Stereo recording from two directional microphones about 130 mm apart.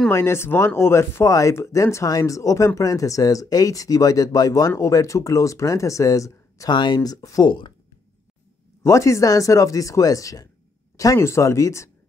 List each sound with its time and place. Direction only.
0.1 s speech: 20° left (ahead or behind)
8.8 s speech: 20° left (ahead or behind)